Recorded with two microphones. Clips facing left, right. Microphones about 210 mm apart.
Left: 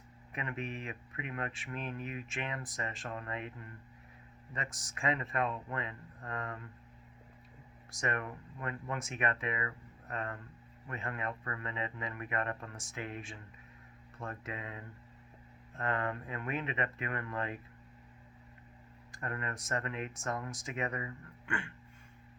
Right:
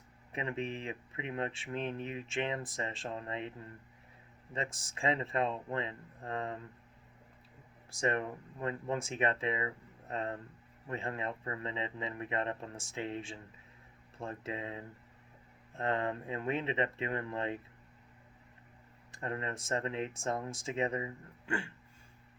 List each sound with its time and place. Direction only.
0.3 s speech: 30° right (ahead or behind)
7.9 s speech: 30° right (ahead or behind)
19.1 s speech: 25° right (ahead or behind)